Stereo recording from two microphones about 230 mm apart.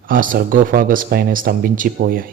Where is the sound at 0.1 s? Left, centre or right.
Right.